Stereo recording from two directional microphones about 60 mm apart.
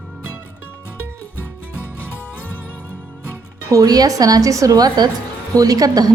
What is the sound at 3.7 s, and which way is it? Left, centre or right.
A woman's voice, right.